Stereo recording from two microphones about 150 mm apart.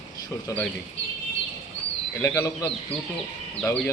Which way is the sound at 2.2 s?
20° left (ahead or behind).